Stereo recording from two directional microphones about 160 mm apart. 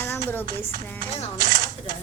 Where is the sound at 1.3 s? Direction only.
60° right (ahead or behind).